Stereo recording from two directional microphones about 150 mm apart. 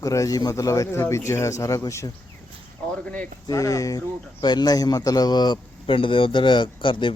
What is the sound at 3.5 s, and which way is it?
Speech, 20° left (ahead or behind).